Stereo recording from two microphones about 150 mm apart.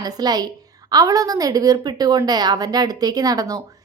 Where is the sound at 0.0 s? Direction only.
25° right (ahead or behind).